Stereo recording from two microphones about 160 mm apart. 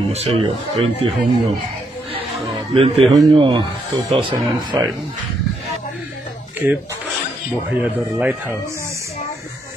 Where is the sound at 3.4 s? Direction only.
30° right (ahead or behind).